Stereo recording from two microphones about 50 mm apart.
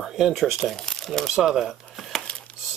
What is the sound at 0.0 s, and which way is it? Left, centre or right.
Speech, centre.